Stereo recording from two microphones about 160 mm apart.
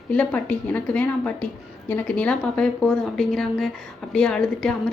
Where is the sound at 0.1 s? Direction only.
10° left (ahead or behind).